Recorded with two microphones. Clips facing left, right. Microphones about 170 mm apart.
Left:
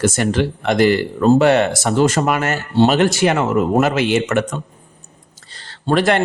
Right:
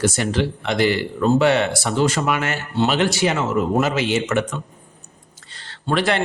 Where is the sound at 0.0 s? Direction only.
50° left (ahead or behind).